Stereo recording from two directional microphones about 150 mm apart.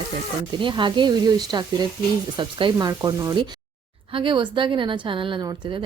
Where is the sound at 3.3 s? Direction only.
30° right (ahead or behind).